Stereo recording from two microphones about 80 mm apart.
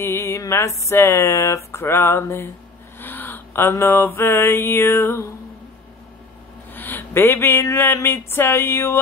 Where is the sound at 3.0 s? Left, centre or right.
Left.